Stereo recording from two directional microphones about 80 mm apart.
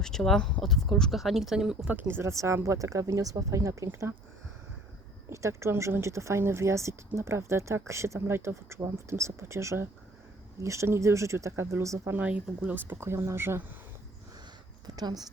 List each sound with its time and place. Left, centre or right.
0.0 s speech: centre
1.9 s speech: right
5.3 s speech: right
12.1 s speech: centre
14.8 s a woman's voice: right